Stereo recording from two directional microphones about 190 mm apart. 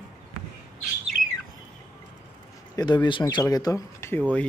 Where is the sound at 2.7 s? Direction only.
25° left (ahead or behind).